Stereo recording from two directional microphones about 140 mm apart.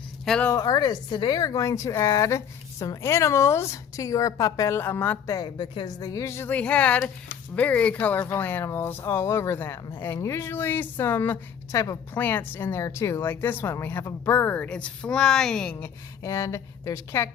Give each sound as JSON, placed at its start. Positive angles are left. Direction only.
{"t": 0.4, "sound": "speech", "side_deg": 25}
{"t": 16.2, "sound": "speech", "side_deg": 25}